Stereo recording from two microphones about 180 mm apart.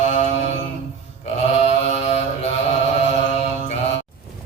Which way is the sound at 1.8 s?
35° left (ahead or behind).